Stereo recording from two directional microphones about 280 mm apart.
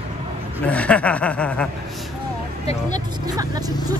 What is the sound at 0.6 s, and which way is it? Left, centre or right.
Snicker, centre.